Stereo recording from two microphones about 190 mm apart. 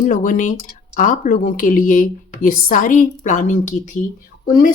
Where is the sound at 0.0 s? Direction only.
45° left (ahead or behind).